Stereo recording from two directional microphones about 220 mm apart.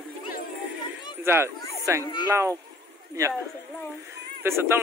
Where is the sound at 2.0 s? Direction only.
20° left (ahead or behind).